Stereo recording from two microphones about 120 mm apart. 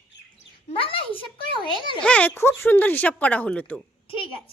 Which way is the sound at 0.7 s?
50° left (ahead or behind).